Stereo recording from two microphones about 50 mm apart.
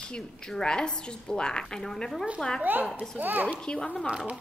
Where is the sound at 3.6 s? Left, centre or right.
Centre.